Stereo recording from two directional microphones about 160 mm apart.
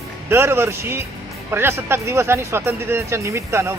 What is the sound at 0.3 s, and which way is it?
Speech, 15° right (ahead or behind).